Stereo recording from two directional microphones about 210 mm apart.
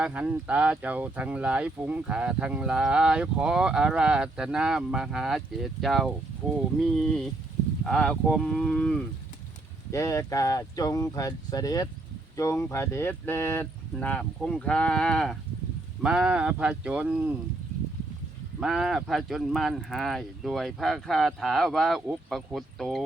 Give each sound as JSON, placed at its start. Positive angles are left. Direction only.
{"t": 0.0, "sound": "speech", "side_deg": -5}
{"t": 18.6, "sound": "speech", "side_deg": 0}